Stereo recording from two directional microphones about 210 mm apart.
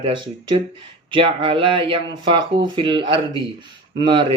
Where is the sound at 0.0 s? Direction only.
20° right (ahead or behind).